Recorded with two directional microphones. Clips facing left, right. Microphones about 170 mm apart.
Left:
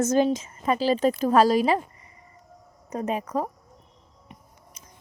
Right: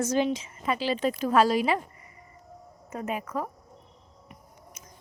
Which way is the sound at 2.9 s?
35° left (ahead or behind).